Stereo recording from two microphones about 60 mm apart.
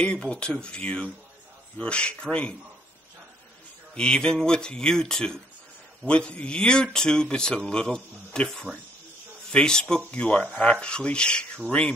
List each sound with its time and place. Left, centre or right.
0.0 s speech: centre
3.9 s speech: centre
9.5 s speech: centre